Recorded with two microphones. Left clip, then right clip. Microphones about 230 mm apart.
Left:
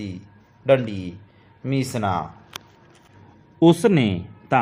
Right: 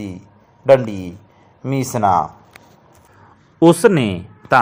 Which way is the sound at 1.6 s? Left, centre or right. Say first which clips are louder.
Right 8 dB; centre.